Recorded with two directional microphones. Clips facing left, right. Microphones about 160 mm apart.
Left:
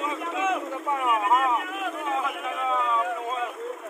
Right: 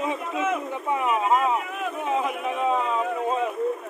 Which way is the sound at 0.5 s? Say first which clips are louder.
Right 2 dB; centre (ahead or behind).